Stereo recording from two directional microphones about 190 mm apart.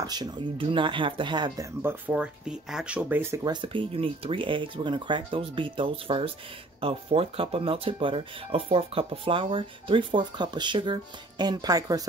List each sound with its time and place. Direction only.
0.0 s speech: 20° right (ahead or behind)
1.8 s speech: 10° right (ahead or behind)
3.6 s speech: 30° right (ahead or behind)